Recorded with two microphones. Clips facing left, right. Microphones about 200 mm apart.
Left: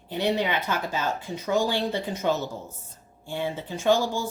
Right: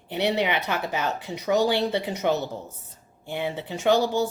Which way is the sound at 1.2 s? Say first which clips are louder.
Right 4 dB; 75° right (ahead or behind).